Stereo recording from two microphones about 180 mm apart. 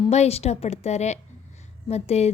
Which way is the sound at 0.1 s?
35° left (ahead or behind).